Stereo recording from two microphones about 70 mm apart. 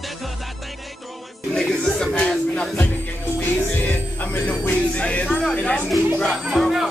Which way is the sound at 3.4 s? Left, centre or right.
Left.